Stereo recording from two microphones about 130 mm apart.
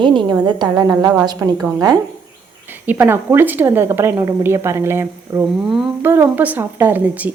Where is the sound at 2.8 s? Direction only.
15° right (ahead or behind).